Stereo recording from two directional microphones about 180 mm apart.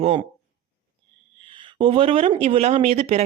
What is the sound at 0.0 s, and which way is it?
Speech, 35° right (ahead or behind).